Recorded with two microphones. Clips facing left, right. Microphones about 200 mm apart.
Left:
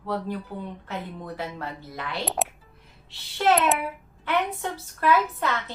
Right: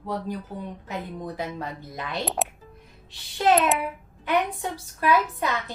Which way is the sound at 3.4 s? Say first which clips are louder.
Right 1 dB; 15° right (ahead or behind).